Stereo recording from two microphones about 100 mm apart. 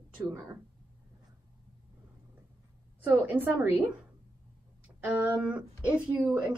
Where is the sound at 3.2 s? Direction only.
20° right (ahead or behind).